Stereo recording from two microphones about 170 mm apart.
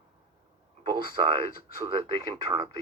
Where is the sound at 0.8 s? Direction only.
30° right (ahead or behind).